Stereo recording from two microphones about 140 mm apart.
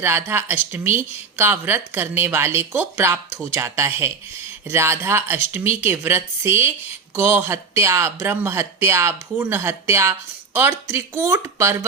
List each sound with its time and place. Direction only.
0.0 s a woman's voice: 15° right (ahead or behind)